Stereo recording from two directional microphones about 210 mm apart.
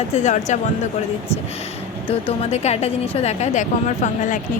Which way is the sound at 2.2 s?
30° left (ahead or behind).